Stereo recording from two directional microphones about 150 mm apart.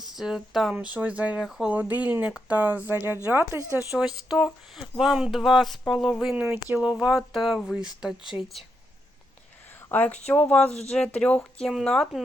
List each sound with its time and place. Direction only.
0.0 s speech: centre (ahead or behind)
8.2 s speech: 35° left (ahead or behind)
9.9 s speech: 10° left (ahead or behind)
10.7 s speech: 45° left (ahead or behind)
10.9 s speech: 5° left (ahead or behind)